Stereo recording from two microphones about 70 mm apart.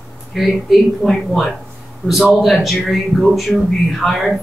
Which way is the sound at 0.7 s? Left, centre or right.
Centre.